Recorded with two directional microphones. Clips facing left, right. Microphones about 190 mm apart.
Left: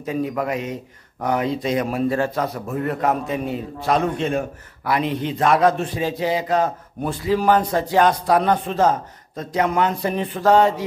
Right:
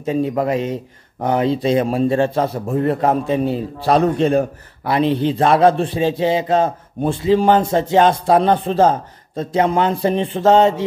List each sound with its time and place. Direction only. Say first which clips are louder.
0.0 s a man's voice: right 5 dB; 25° right (ahead or behind)